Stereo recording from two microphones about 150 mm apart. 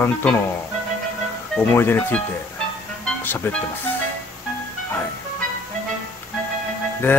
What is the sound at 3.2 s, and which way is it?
Speech, 15° left (ahead or behind).